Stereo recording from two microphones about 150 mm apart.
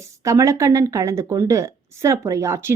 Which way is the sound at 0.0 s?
20° right (ahead or behind).